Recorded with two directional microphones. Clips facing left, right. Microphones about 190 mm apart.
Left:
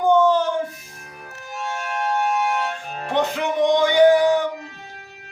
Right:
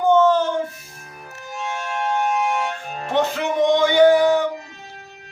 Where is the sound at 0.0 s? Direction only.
15° left (ahead or behind).